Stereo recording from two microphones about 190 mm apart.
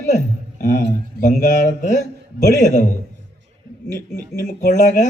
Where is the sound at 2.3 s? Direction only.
40° left (ahead or behind).